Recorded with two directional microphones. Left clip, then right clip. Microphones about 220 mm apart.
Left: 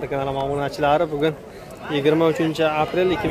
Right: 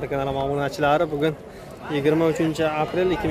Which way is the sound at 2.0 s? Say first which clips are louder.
Left 2 dB; 5° left (ahead or behind).